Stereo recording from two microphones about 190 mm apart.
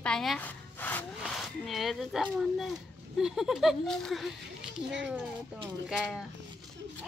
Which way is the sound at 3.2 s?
5° right (ahead or behind).